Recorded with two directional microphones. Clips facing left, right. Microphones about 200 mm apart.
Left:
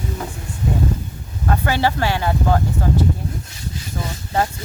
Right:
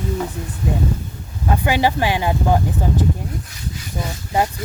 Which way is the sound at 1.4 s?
15° right (ahead or behind).